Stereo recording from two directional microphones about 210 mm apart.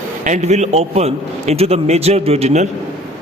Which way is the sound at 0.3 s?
35° right (ahead or behind).